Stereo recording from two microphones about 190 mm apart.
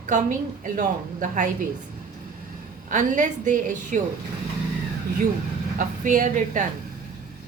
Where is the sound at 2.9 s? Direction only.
40° right (ahead or behind).